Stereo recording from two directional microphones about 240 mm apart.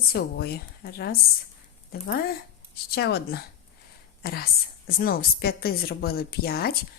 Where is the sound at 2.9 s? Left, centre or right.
Left.